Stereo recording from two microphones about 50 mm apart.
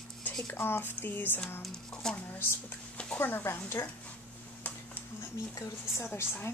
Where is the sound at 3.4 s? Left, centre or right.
Left.